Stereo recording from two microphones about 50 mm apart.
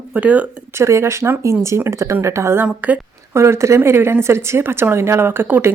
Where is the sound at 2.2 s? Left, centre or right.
Right.